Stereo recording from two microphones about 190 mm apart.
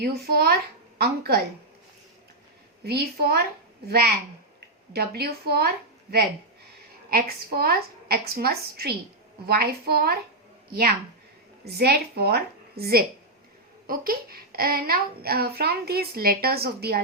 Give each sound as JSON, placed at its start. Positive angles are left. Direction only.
{"t": 0.0, "sound": "a woman's voice", "side_deg": -55}
{"t": 2.8, "sound": "a woman's voice", "side_deg": -55}
{"t": 11.6, "sound": "a woman's voice", "side_deg": -55}